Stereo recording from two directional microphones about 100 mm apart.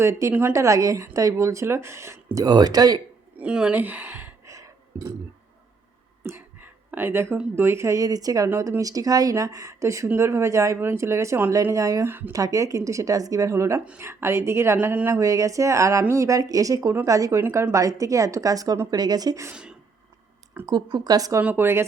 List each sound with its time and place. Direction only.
0.0 s speech: 30° right (ahead or behind)
3.3 s a sound: 10° right (ahead or behind); by 5.1 s 30° right (ahead or behind)
6.2 s a sound: 20° right (ahead or behind)
7.5 s speech: 25° right (ahead or behind)
8.4 s speech: 25° right (ahead or behind)
15.2 s speech: 35° right (ahead or behind)
20.7 s speech: 45° right (ahead or behind)
21.4 s speech: 20° right (ahead or behind)